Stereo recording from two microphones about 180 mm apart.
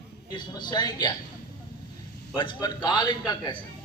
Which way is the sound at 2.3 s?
25° left (ahead or behind).